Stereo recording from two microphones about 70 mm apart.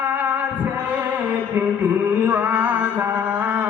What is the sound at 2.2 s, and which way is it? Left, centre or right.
Music, right.